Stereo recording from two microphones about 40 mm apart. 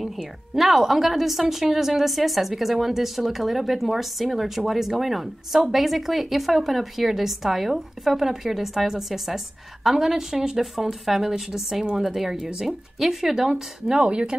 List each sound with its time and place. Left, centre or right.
0.0 s a woman's voice: centre
14.0 s speech: right